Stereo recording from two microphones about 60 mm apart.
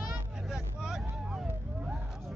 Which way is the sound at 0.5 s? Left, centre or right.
Centre.